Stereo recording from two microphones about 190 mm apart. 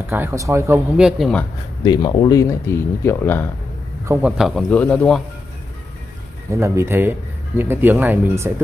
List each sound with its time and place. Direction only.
0.1 s speech: 15° right (ahead or behind)
0.9 s a man's voice: centre (ahead or behind)
1.9 s speech: 20° left (ahead or behind)
4.0 s a man's voice: 15° right (ahead or behind)
4.4 s a man's voice: centre (ahead or behind)
6.5 s speech: 15° right (ahead or behind)